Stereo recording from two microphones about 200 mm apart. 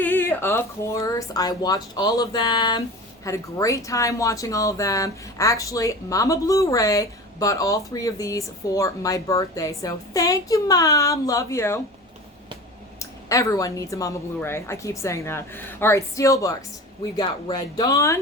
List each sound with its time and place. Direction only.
0.0 s speech: 10° left (ahead or behind)
13.0 s speech: 15° left (ahead or behind)